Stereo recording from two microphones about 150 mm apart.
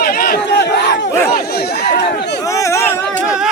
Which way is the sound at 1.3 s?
90° left.